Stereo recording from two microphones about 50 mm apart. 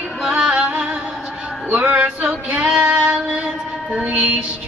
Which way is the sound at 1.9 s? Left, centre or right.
Right.